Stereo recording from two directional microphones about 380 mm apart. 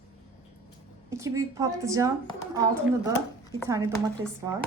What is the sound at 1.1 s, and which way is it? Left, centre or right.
Speech, centre.